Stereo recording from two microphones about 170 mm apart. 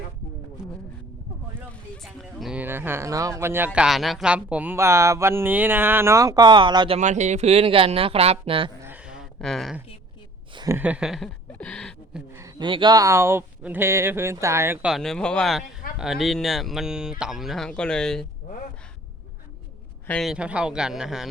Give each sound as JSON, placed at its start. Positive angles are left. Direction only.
{"t": 2.0, "sound": "speech", "side_deg": 0}
{"t": 7.0, "sound": "speech", "side_deg": -45}
{"t": 8.8, "sound": "a sound", "side_deg": -10}
{"t": 10.5, "sound": "speech", "side_deg": -25}
{"t": 10.8, "sound": "speech", "side_deg": -10}
{"t": 12.3, "sound": "speech", "side_deg": -20}
{"t": 20.1, "sound": "speech", "side_deg": 0}